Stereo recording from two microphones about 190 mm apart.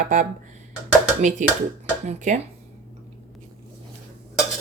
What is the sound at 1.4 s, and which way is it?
Speech, 40° right (ahead or behind).